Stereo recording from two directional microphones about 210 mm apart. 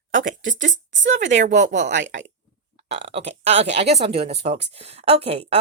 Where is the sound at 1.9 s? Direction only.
55° right (ahead or behind).